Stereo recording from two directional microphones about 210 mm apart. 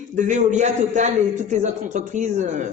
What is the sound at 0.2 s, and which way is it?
Speech, 35° right (ahead or behind).